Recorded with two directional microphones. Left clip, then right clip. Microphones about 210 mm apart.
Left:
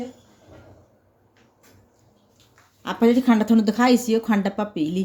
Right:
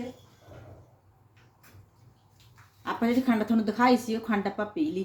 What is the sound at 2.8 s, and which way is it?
Speech, 50° left (ahead or behind).